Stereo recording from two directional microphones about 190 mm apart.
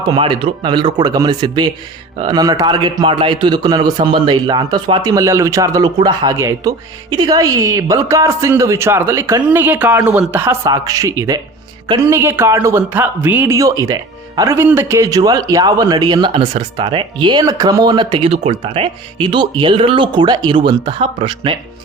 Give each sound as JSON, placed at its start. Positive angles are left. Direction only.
{"t": 0.0, "sound": "a man's voice", "side_deg": -25}